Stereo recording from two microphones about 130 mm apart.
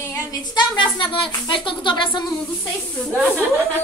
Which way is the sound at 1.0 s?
40° left (ahead or behind).